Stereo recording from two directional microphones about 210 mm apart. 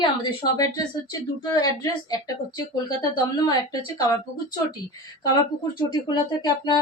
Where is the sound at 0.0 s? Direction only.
20° left (ahead or behind).